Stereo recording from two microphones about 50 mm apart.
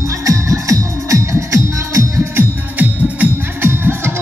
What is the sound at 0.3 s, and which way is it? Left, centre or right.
Music, right.